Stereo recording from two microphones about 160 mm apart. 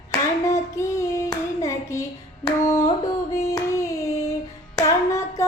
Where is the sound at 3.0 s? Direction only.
20° left (ahead or behind).